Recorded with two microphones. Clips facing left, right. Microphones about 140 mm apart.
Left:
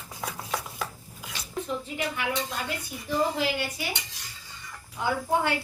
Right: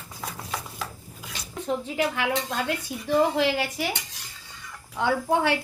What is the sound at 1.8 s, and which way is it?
A woman's voice, 90° right.